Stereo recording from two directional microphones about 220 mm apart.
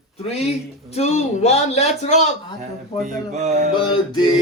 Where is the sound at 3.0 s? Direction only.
30° right (ahead or behind).